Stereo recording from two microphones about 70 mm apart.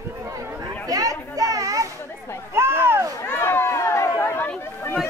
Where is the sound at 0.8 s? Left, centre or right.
Right.